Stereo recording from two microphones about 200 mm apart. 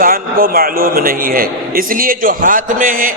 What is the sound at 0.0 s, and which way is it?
A man's voice, 45° right (ahead or behind).